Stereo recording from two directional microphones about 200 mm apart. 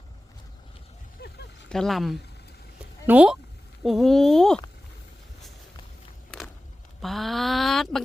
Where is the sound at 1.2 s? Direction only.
55° left (ahead or behind).